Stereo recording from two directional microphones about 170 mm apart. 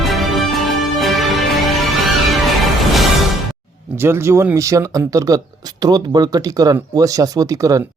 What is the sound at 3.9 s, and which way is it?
Speech, 15° right (ahead or behind).